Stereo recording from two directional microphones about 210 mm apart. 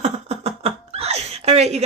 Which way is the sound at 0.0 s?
30° right (ahead or behind).